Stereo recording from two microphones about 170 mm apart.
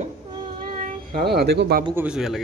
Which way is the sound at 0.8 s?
60° right (ahead or behind).